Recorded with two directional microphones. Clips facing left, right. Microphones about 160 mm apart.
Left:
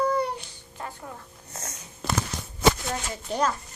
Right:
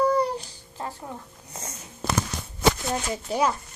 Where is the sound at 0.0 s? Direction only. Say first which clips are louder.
Right 3 dB; 35° right (ahead or behind).